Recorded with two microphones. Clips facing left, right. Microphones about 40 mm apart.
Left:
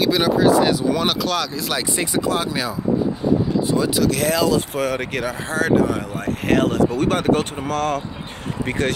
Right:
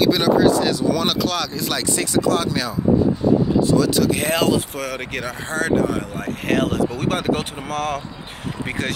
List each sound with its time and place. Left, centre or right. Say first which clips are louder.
0.0 s speech: right 1 dB; centre
1.2 s speech: even; centre
2.0 s speech: right 3 dB; centre
4.1 s speech: even; right
4.6 s speech: left 4 dB; centre